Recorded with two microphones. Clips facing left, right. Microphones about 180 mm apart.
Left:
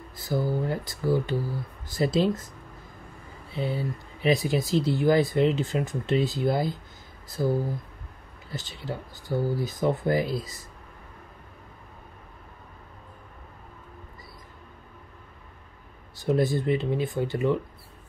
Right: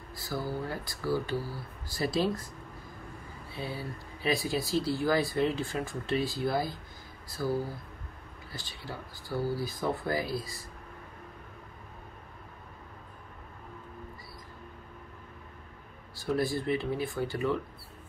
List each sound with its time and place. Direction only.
0.1 s speech: 20° left (ahead or behind)
3.5 s speech: 25° left (ahead or behind)
16.2 s speech: 20° left (ahead or behind)